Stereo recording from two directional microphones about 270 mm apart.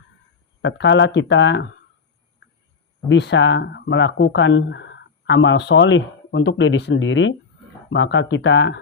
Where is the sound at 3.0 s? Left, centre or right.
Left.